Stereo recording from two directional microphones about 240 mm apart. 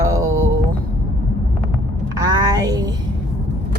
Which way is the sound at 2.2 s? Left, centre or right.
Centre.